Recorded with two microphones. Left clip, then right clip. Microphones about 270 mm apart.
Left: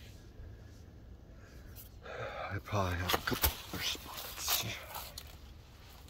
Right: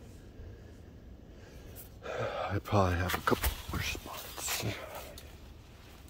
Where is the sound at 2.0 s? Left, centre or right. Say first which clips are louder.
Right 6 dB; right.